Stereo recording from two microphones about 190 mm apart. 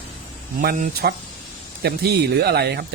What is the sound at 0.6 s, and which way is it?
Speech, 55° right (ahead or behind).